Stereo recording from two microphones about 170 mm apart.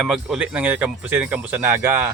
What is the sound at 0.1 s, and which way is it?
Speech, 5° right (ahead or behind).